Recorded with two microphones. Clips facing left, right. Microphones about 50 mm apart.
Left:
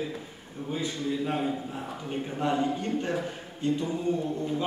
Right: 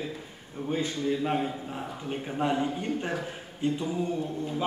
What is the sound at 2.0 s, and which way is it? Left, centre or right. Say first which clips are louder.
A man's voice: right 1 dB; centre.